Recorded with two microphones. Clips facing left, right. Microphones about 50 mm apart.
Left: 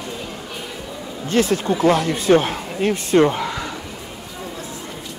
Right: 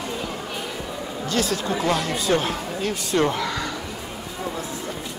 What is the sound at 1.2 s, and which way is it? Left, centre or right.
Speech, left.